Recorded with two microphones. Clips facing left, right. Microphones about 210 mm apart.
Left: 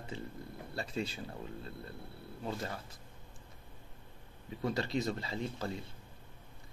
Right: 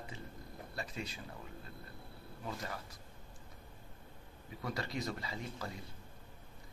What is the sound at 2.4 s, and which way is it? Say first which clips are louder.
Speech: left 4 dB; 30° left (ahead or behind).